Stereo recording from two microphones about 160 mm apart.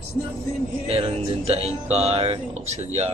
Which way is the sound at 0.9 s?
35° right (ahead or behind).